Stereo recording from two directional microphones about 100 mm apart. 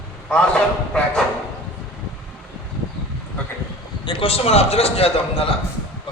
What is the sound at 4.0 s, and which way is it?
A man's voice, 60° left (ahead or behind).